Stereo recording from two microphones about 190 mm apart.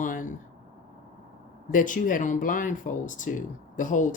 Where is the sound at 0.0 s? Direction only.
45° left (ahead or behind).